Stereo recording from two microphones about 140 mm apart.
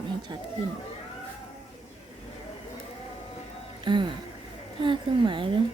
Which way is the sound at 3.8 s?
35° right (ahead or behind).